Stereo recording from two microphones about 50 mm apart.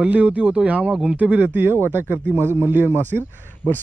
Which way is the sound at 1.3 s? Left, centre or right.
Right.